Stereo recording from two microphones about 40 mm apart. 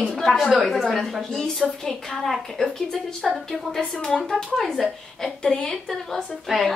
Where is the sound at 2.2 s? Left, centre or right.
Centre.